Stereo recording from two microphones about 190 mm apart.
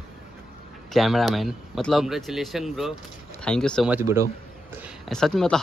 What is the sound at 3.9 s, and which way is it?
Speech, 15° right (ahead or behind).